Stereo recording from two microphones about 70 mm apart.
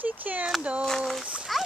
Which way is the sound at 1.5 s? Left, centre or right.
Centre.